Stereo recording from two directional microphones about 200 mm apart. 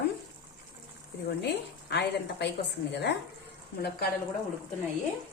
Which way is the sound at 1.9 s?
55° left (ahead or behind).